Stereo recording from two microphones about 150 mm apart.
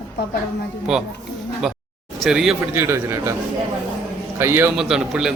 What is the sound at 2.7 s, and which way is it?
Speech, 15° right (ahead or behind).